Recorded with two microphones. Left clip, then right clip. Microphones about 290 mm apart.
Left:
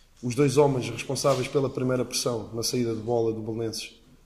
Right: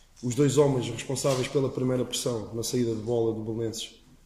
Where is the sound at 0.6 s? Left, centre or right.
Centre.